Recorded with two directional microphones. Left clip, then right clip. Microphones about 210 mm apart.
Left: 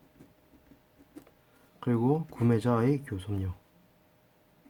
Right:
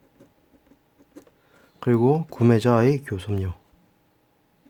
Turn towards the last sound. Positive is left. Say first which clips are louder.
# right 8 dB
turn(degrees=-40)  # may be behind; listen again after turning